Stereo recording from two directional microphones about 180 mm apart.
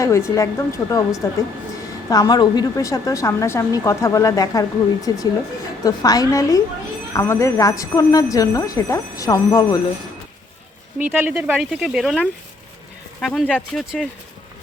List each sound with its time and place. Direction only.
0.0 s a woman's voice: 15° left (ahead or behind)
10.9 s speech: 10° right (ahead or behind)